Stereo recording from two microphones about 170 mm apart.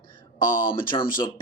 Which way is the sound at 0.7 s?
30° left (ahead or behind).